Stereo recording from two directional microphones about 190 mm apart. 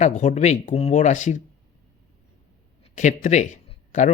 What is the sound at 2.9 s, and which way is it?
Speech, 40° left (ahead or behind).